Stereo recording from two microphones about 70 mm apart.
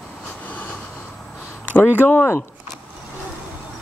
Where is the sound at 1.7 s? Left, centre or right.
Left.